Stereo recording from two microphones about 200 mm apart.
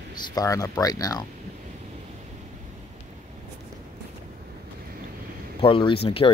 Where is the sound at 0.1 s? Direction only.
20° left (ahead or behind).